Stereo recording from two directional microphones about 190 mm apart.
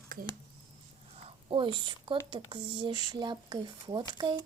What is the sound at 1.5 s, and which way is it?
Speech, 25° right (ahead or behind).